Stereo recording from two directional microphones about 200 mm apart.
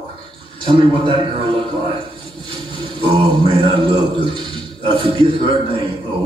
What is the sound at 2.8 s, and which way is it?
A man's voice, 25° right (ahead or behind).